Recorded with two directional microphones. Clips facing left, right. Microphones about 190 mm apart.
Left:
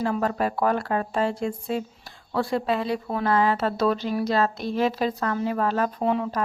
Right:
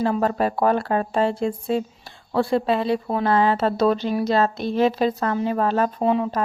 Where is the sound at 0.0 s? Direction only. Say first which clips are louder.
Right 4 dB; 30° right (ahead or behind).